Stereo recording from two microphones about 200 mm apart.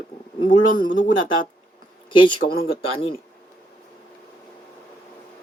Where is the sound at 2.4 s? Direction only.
45° left (ahead or behind).